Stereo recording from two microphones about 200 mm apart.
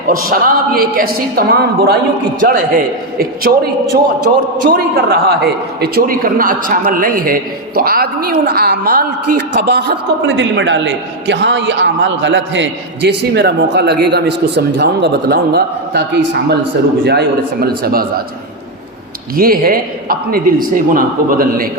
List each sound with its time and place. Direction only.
0.1 s a man's voice: 45° right (ahead or behind)
2.4 s a man's voice: 40° right (ahead or behind)
19.4 s a man's voice: 45° right (ahead or behind)